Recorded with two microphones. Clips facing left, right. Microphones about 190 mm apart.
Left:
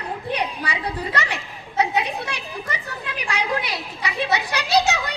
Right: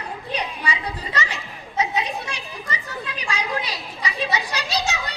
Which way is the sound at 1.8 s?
60° left (ahead or behind).